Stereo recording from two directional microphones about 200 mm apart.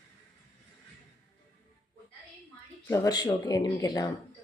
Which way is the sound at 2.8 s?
15° left (ahead or behind).